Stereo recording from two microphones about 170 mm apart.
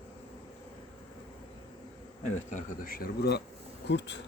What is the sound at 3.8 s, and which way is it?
Speech, 90° left.